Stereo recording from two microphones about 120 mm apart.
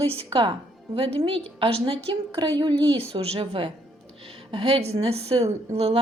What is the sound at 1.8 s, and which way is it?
Speech, 40° right (ahead or behind).